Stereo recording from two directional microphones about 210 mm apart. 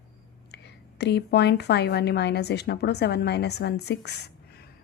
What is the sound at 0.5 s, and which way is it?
A woman's voice, 55° left (ahead or behind).